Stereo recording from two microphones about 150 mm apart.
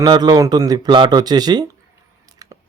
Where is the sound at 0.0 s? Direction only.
25° right (ahead or behind).